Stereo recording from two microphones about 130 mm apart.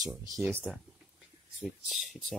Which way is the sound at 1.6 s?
Centre (ahead or behind).